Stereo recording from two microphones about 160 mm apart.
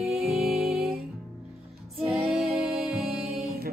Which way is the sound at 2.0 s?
Centre (ahead or behind).